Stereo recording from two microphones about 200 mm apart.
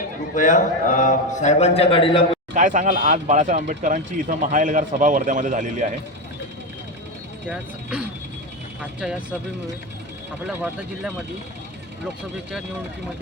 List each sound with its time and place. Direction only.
0.3 s a man's voice: 40° left (ahead or behind)
2.6 s speech: 40° right (ahead or behind)
7.4 s speech: 5° right (ahead or behind)